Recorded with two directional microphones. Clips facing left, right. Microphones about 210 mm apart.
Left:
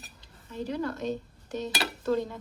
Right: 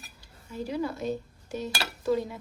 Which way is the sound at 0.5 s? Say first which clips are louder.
Right 1 dB; 10° right (ahead or behind).